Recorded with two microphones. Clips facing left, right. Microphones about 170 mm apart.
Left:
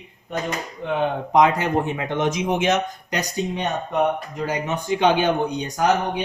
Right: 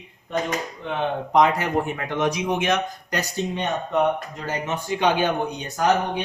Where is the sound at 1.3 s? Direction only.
20° left (ahead or behind).